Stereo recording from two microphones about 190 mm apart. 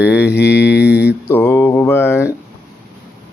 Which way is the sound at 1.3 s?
10° left (ahead or behind).